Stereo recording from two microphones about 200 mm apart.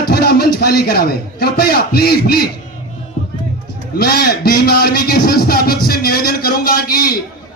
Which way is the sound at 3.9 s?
50° left (ahead or behind).